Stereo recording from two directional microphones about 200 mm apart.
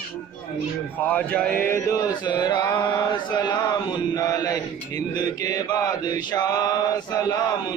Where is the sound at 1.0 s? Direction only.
10° left (ahead or behind).